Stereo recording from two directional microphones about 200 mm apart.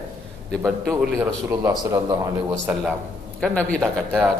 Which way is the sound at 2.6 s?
5° right (ahead or behind).